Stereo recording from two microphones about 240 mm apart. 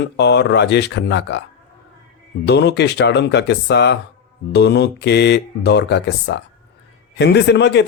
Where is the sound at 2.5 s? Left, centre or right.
Left.